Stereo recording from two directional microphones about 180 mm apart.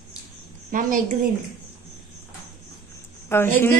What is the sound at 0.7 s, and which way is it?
Speech, 50° right (ahead or behind).